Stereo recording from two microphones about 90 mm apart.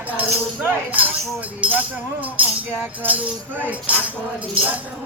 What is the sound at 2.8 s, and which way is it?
Music, 20° right (ahead or behind).